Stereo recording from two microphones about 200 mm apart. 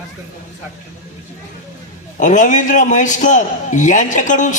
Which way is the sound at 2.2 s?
40° left (ahead or behind).